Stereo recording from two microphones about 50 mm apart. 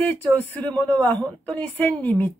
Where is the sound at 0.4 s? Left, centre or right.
Left.